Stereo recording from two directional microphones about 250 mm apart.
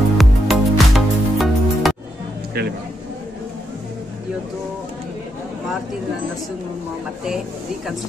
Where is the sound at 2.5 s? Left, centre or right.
Right.